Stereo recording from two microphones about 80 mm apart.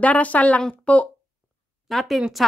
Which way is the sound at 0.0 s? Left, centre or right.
Centre.